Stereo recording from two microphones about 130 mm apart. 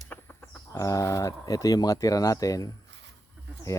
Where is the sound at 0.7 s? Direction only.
25° left (ahead or behind).